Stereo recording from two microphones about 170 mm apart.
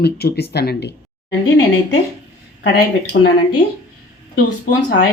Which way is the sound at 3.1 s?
80° left.